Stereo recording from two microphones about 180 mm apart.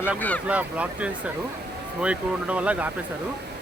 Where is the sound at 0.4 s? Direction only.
10° right (ahead or behind).